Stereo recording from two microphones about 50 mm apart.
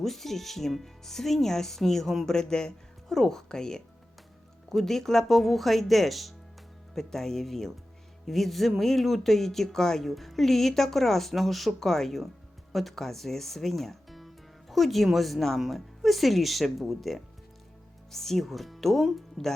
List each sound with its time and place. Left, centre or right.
0.0 s speech: centre